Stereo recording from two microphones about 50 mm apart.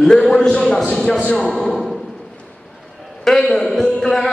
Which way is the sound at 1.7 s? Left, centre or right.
Centre.